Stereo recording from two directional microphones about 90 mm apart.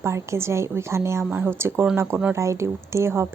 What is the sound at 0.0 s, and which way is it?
A woman's voice, 30° right (ahead or behind).